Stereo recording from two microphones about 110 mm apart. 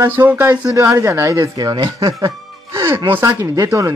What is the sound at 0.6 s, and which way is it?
Speech, 30° right (ahead or behind).